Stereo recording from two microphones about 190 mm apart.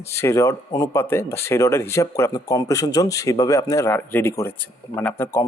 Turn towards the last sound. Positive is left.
turn(degrees=15)  # may be behind; listen again after turning